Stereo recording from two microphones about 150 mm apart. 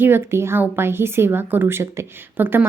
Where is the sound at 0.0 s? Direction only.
15° right (ahead or behind).